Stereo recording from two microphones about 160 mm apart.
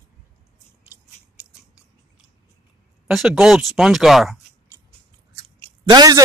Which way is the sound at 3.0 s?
Centre (ahead or behind).